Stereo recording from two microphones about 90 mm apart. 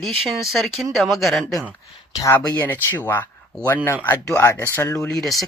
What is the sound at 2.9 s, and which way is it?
Speech, 20° left (ahead or behind).